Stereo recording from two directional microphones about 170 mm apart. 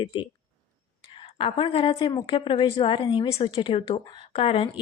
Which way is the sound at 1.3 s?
30° left (ahead or behind).